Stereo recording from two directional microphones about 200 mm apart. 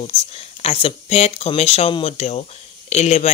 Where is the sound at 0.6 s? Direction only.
30° left (ahead or behind).